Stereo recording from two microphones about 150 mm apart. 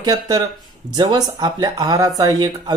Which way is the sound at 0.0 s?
25° right (ahead or behind).